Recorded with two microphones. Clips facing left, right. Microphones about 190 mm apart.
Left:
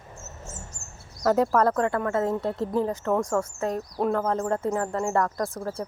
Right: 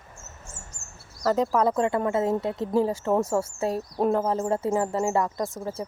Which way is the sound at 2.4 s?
Centre (ahead or behind).